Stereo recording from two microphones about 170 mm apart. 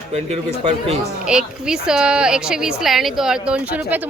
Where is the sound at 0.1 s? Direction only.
40° right (ahead or behind).